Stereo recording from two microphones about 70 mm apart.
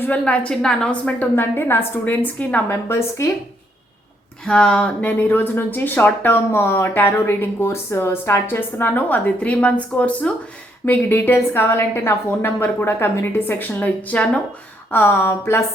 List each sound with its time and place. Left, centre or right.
0.0 s a woman's voice: left
1.4 s speech: left
2.6 s a woman's voice: left
4.4 s a woman's voice: centre
14.8 s a woman's voice: left